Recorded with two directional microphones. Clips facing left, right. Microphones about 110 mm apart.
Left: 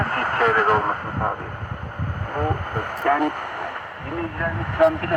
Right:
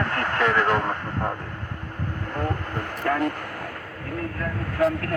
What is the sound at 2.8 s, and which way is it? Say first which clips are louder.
Speech: left 4 dB; 55° left (ahead or behind).